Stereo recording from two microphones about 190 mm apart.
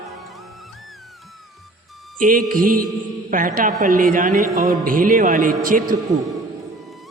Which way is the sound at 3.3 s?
45° right (ahead or behind).